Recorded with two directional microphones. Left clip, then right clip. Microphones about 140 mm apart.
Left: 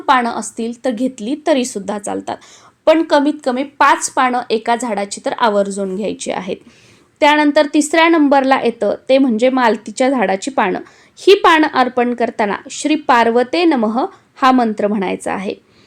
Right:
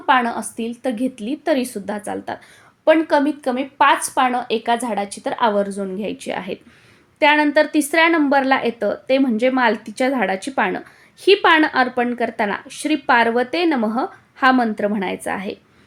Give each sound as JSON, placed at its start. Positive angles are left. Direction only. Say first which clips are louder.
{"t": 0.0, "sound": "a woman's voice", "louder": "left 3 dB", "side_deg": 30}